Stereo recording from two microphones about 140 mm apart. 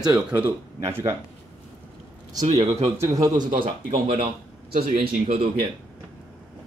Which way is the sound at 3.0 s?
25° right (ahead or behind).